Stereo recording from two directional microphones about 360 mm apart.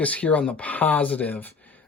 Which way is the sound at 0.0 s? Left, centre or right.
Centre.